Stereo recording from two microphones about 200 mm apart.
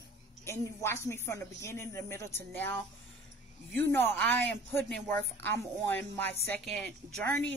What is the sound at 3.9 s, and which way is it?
Speech, 10° left (ahead or behind).